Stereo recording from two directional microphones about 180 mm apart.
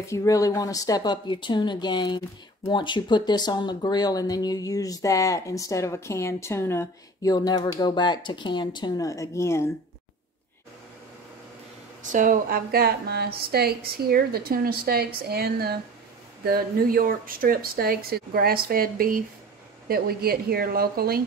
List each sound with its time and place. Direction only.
0.0 s speech: 15° left (ahead or behind)
12.1 s a woman's voice: 45° right (ahead or behind)